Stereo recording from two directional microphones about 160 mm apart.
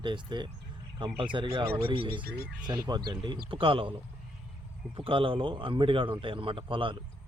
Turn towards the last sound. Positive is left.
turn(degrees=-30)  # may be behind; listen again after turning